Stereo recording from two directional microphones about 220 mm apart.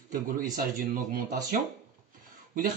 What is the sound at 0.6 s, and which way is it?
Speech, 40° right (ahead or behind).